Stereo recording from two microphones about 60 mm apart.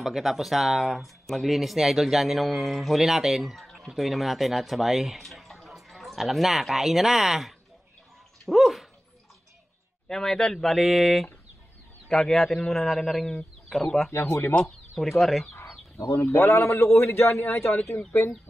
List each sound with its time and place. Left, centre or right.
0.0 s speech: centre
10.0 s a man's voice: centre
14.1 s a man's voice: left
15.0 s speech: centre
16.0 s a man's voice: left